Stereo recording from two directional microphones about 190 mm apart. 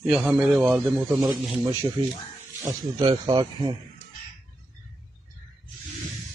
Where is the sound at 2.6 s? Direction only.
25° right (ahead or behind).